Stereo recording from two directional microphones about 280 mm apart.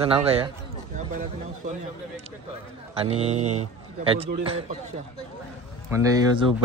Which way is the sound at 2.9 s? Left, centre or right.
Right.